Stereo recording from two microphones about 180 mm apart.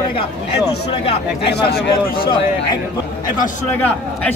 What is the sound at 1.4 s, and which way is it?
Speech, 65° left (ahead or behind).